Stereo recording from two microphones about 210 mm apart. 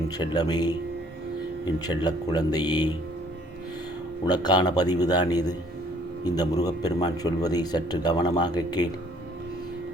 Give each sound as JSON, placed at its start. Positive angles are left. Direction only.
{"t": 0.2, "sound": "a man's voice", "side_deg": 20}
{"t": 4.3, "sound": "a man's voice", "side_deg": 20}